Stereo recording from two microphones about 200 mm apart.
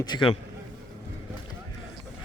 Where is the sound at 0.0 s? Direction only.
25° left (ahead or behind).